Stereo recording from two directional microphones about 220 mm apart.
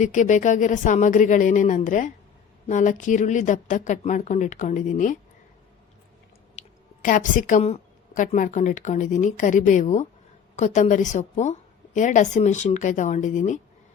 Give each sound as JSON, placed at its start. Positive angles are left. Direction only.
{"t": 0.0, "sound": "a woman's voice", "side_deg": 35}
{"t": 6.6, "sound": "a woman's voice", "side_deg": 35}